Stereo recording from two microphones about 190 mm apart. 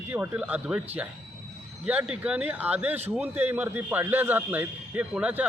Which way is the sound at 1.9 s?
5° right (ahead or behind).